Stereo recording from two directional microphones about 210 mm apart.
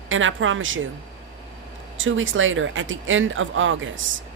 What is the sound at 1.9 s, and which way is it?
Speech, 65° right (ahead or behind).